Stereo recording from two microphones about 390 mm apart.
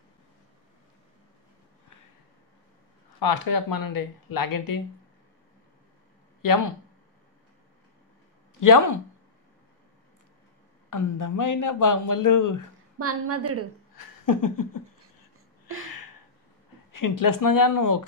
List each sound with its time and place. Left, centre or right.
3.2 s speech: left
6.4 s speech: left
8.5 s speech: left
10.9 s speech: left
13.0 s a woman's voice: right
13.9 s a sound: left
16.9 s speech: left